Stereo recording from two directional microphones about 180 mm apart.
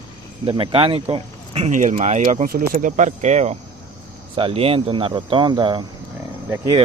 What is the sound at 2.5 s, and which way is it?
Speech, 50° right (ahead or behind).